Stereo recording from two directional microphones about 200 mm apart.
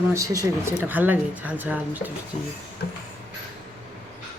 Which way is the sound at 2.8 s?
55° left (ahead or behind).